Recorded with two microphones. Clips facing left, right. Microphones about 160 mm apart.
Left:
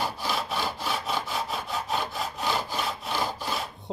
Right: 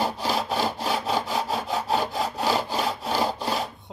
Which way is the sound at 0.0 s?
35° right (ahead or behind).